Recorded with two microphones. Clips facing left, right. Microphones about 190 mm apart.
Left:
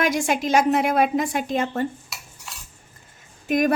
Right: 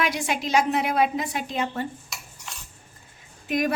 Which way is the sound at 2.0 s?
5° left (ahead or behind).